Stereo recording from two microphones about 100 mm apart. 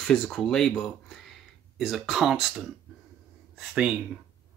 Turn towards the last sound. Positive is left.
turn(degrees=-10)  # may be behind; listen again after turning